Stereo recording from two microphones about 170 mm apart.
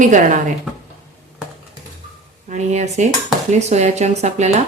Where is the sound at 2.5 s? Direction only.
40° right (ahead or behind).